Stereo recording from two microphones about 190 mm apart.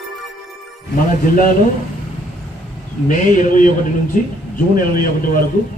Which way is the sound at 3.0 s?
45° left (ahead or behind).